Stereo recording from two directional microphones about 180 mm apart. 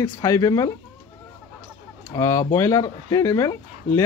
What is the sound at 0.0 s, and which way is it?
Speech, 20° left (ahead or behind).